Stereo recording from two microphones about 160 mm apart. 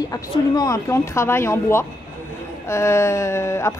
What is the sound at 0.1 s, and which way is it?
A woman's voice, 20° left (ahead or behind).